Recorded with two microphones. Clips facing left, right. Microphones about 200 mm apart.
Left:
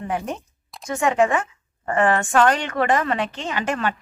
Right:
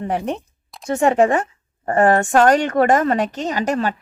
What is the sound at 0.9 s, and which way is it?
A woman's voice, 35° right (ahead or behind).